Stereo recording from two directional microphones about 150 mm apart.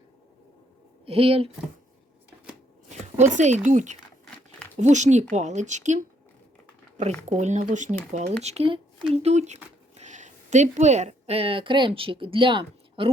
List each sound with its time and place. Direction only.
1.0 s speech: 40° right (ahead or behind)
3.2 s speech: 50° right (ahead or behind)
7.3 s a woman's voice: 50° right (ahead or behind); by 13.1 s 35° right (ahead or behind)